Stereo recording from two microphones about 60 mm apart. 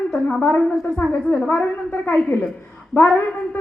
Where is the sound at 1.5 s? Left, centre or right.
Left.